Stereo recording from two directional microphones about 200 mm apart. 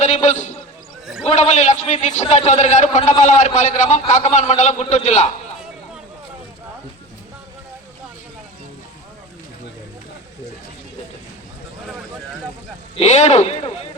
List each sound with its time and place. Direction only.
0.0 s a sound: 35° left (ahead or behind)
1.2 s a man's voice: 35° left (ahead or behind)
13.0 s a man's voice: 35° left (ahead or behind)